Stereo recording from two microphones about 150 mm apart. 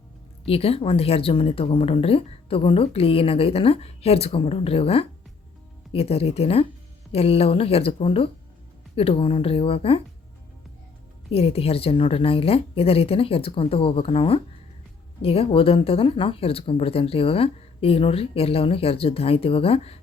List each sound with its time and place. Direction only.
0.4 s speech: 40° left (ahead or behind)
11.3 s speech: 40° left (ahead or behind)